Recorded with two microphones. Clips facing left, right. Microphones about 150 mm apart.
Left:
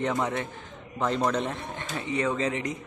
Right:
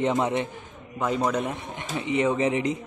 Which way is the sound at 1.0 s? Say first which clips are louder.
Right 1 dB; 10° right (ahead or behind).